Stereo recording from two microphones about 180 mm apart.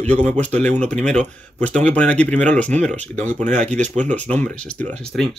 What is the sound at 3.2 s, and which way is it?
Speech, 40° right (ahead or behind).